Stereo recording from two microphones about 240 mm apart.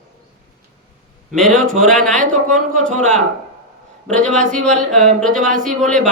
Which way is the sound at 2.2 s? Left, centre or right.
Right.